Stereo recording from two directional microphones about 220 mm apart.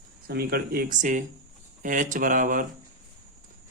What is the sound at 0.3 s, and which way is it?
Speech, 45° right (ahead or behind).